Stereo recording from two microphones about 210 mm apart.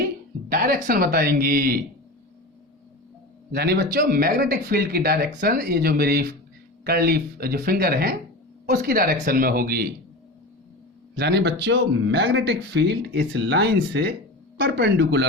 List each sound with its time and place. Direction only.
0.5 s speech: 45° right (ahead or behind)
3.5 s speech: 50° right (ahead or behind)
11.2 s speech: 55° right (ahead or behind)